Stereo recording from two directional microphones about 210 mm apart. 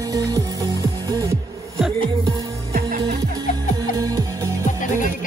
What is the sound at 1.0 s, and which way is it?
Music, 15° right (ahead or behind).